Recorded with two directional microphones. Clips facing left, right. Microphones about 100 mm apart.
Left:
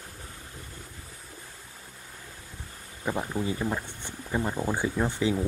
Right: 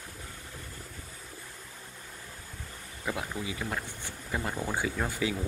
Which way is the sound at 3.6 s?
20° left (ahead or behind).